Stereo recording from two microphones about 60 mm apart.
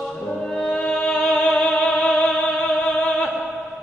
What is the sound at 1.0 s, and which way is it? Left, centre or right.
Music, centre.